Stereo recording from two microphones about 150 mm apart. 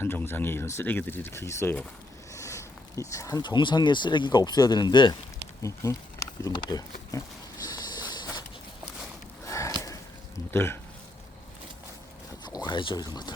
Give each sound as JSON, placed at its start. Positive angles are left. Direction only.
{"t": 0.0, "sound": "speech", "side_deg": 15}
{"t": 7.6, "sound": "a sound", "side_deg": 25}
{"t": 10.5, "sound": "speech", "side_deg": 15}
{"t": 12.6, "sound": "speech", "side_deg": 30}